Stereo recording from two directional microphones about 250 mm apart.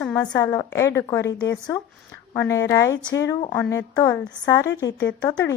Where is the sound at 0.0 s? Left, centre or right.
Centre.